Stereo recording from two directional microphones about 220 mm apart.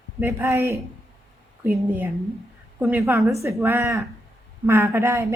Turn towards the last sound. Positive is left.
turn(degrees=-10)  # may be behind; listen again after turning